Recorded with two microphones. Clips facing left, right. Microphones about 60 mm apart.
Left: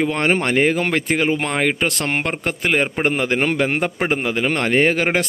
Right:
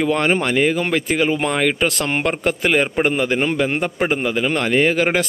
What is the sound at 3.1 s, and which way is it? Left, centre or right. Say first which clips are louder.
A man's voice: even; left.